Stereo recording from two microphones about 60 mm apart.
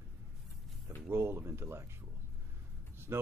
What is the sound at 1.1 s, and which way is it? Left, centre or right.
Speech, right.